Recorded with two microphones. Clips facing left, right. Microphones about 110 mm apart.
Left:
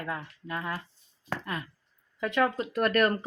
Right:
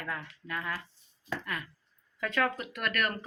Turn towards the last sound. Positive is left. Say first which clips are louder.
# left 8 dB
turn(degrees=35)  # may be behind; listen again after turning